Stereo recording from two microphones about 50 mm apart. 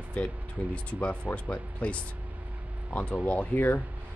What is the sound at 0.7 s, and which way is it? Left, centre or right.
Speech, left.